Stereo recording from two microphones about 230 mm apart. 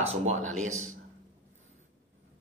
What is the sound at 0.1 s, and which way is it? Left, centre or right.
Speech, right.